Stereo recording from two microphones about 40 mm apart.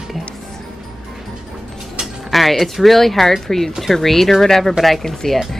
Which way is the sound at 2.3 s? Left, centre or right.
Centre.